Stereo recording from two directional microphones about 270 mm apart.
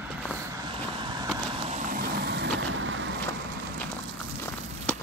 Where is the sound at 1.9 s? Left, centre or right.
Right.